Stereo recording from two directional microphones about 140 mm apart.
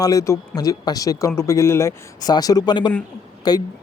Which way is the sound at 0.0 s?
25° left (ahead or behind).